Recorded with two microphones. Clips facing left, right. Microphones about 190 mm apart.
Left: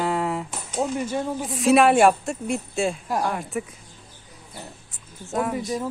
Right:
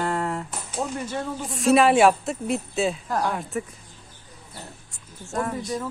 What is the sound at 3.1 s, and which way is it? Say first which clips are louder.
Speech: even; 10° left (ahead or behind).